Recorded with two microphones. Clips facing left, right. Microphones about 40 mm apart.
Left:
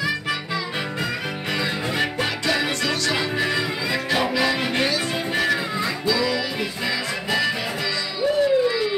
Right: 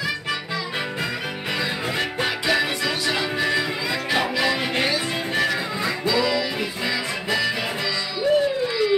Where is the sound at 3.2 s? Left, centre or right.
Centre.